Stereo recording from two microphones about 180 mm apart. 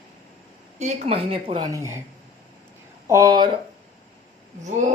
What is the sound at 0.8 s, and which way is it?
Speech, 35° right (ahead or behind).